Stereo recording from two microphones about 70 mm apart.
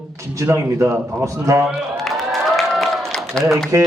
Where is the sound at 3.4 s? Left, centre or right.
Centre.